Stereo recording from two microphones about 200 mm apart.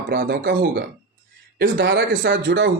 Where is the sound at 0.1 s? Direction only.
55° right (ahead or behind).